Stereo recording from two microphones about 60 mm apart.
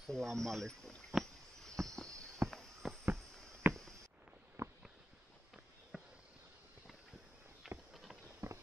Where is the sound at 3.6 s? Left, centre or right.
Right.